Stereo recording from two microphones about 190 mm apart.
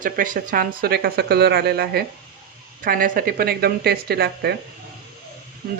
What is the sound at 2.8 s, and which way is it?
Speech, 45° right (ahead or behind).